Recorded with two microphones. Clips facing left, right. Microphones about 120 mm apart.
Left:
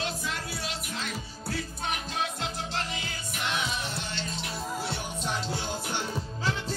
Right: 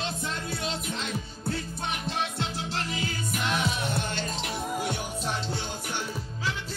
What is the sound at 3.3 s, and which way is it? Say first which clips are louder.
Music: right 2 dB; 50° right (ahead or behind).